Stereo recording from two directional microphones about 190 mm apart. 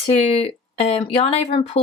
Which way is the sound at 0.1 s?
30° left (ahead or behind).